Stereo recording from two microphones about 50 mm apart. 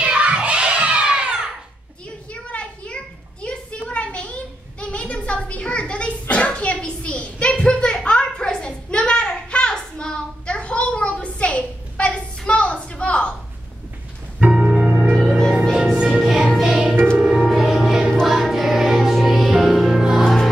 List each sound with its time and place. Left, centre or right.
0.0 s music: right
2.3 s a sound: left
14.4 s music: right
15.1 s music: centre
15.7 s music: centre